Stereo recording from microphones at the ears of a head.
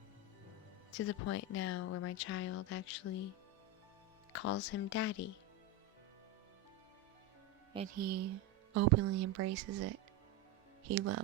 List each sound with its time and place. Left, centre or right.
0.9 s speech: left
7.8 s speech: right